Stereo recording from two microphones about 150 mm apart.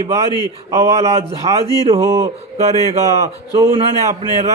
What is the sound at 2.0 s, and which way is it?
Speech, 20° right (ahead or behind).